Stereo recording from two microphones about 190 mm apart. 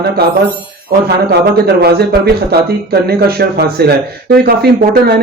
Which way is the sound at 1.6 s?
55° right (ahead or behind).